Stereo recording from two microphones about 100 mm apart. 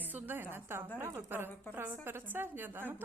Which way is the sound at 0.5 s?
25° right (ahead or behind).